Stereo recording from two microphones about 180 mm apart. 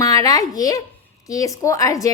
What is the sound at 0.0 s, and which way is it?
A child's voice, 20° left (ahead or behind).